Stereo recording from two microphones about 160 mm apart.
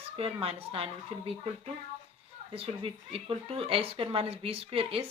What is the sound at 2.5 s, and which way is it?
A child's voice, 35° right (ahead or behind).